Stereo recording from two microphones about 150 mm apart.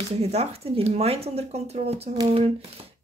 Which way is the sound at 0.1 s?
45° right (ahead or behind).